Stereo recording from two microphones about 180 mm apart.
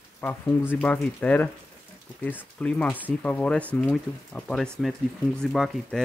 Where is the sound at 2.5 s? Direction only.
5° left (ahead or behind).